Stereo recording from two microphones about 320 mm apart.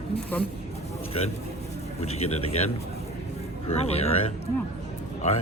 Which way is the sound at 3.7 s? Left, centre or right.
Centre.